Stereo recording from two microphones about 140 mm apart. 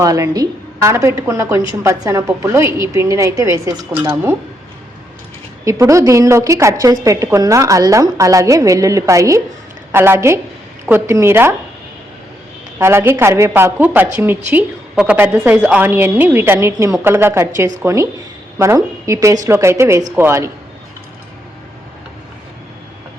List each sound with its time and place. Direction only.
0.0 s a woman's voice: 25° right (ahead or behind)
5.6 s a woman's voice: 20° right (ahead or behind)
12.8 s a woman's voice: 15° right (ahead or behind)